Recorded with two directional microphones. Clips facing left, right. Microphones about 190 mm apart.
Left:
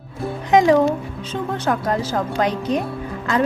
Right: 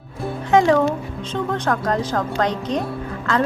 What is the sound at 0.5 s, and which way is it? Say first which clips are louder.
A woman's voice: left 1 dB; 15° left (ahead or behind).